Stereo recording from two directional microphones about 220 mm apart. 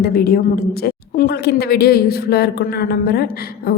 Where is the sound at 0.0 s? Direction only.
45° left (ahead or behind).